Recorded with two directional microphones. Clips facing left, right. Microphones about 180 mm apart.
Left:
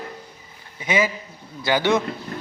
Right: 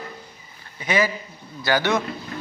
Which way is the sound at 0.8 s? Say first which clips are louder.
Even; 20° left (ahead or behind).